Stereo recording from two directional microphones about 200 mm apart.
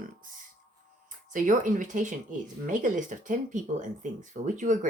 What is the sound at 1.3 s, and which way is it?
Speech, 40° right (ahead or behind).